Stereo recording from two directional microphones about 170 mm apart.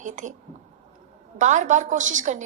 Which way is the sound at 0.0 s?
45° right (ahead or behind).